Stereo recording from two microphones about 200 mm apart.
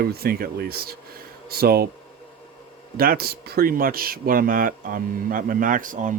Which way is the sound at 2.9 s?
45° right (ahead or behind).